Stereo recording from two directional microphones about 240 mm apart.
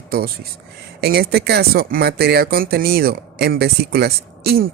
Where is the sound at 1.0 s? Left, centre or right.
Right.